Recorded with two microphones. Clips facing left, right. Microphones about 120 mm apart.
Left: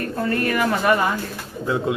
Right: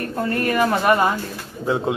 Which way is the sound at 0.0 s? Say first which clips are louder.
Even; 30° right (ahead or behind).